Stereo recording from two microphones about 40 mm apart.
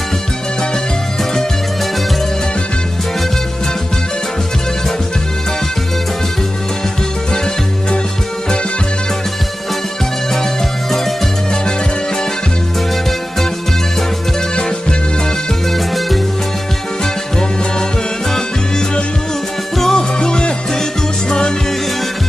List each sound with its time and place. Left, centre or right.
14.5 s music: left
17.0 s music: centre
19.8 s music: centre